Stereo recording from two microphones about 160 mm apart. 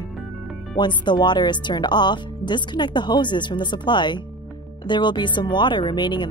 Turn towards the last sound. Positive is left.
turn(degrees=30)  # may be behind; listen again after turning